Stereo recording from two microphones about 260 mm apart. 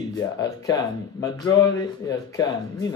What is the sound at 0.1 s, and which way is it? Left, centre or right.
Speech, centre.